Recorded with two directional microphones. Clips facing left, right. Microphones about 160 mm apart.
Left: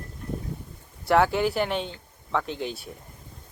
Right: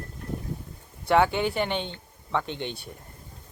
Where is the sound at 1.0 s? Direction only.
Centre (ahead or behind).